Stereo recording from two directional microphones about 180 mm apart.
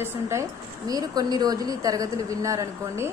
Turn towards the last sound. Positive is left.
turn(degrees=-15)  # may be behind; listen again after turning